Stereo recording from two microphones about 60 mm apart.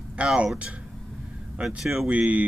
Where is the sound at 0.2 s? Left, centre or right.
Centre.